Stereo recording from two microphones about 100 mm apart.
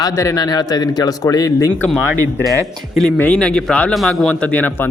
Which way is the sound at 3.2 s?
10° left (ahead or behind).